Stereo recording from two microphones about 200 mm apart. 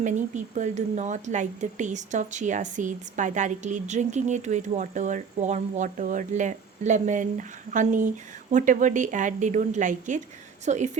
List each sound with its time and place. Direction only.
0.0 s speech: 40° right (ahead or behind)